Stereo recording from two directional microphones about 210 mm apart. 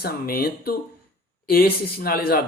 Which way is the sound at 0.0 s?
45° left (ahead or behind).